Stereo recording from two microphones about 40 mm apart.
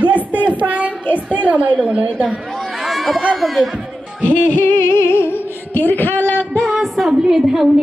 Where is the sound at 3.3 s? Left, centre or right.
Centre.